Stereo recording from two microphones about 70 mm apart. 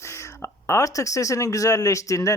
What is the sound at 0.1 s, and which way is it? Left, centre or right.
Speech, left.